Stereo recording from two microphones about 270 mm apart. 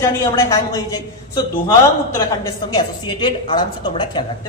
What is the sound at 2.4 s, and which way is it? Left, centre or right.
Speech, centre.